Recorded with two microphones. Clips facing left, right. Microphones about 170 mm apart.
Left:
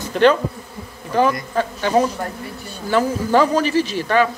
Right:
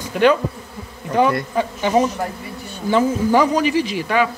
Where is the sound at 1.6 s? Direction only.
15° right (ahead or behind).